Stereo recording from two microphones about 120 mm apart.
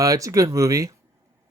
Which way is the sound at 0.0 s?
30° right (ahead or behind).